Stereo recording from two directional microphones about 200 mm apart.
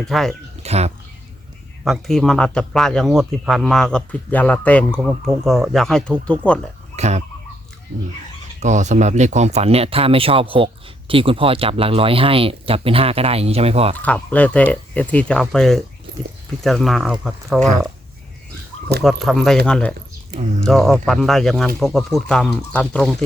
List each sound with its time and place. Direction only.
0.0 s a man's voice: centre (ahead or behind)
0.6 s speech: 30° right (ahead or behind)
1.8 s a man's voice: centre (ahead or behind)
6.9 s a sound: 35° right (ahead or behind)
8.6 s speech: 35° right (ahead or behind)
14.0 s a man's voice: 5° left (ahead or behind)
19.0 s a man's voice: centre (ahead or behind)